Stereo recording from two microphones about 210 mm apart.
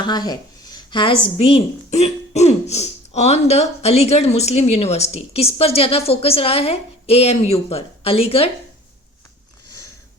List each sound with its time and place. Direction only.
0.0 s speech: 20° left (ahead or behind)